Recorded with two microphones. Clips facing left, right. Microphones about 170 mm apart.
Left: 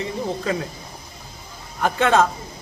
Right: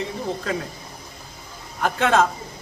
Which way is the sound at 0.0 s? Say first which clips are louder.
Left 2 dB; centre (ahead or behind).